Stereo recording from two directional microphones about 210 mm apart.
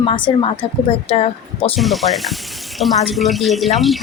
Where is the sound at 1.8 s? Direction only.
Centre (ahead or behind).